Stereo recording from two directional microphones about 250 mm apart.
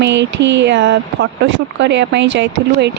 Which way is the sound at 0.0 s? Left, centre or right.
Right.